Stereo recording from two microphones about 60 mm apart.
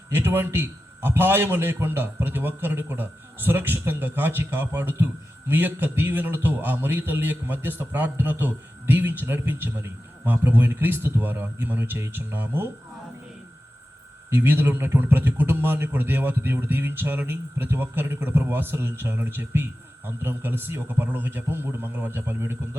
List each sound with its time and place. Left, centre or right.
0.1 s a man's voice: right
14.3 s a man's voice: right